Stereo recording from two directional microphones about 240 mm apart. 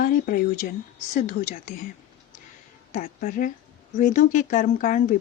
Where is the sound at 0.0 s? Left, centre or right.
Left.